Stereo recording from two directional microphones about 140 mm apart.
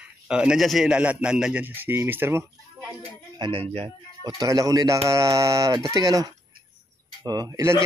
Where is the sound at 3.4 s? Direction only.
40° right (ahead or behind).